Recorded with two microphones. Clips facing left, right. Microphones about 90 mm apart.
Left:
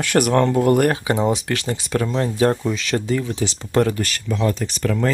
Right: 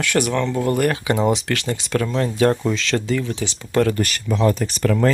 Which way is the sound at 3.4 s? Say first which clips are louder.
Left 3 dB; 35° left (ahead or behind).